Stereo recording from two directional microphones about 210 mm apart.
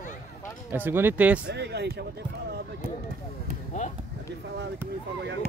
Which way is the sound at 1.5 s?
50° right (ahead or behind).